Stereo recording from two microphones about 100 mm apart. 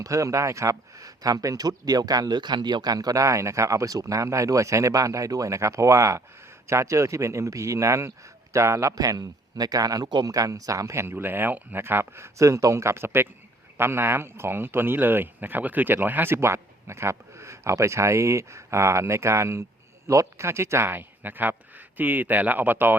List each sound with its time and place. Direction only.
0.0 s speech: 35° right (ahead or behind)